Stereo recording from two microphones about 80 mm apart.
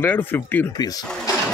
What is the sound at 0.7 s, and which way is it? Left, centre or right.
Speech, left.